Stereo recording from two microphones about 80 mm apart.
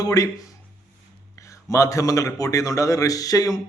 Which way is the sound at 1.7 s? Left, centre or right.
Left.